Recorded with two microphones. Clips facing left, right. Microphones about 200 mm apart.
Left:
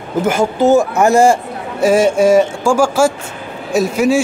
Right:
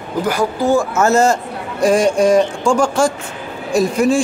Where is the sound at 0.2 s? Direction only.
25° left (ahead or behind).